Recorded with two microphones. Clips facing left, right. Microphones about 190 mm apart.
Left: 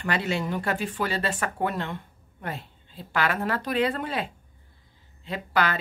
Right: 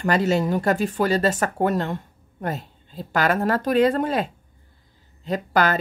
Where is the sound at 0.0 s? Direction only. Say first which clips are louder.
Right 7 dB; 40° right (ahead or behind).